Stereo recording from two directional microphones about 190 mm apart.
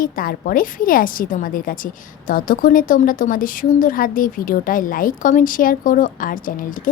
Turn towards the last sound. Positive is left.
turn(degrees=45)  # may be behind; listen again after turning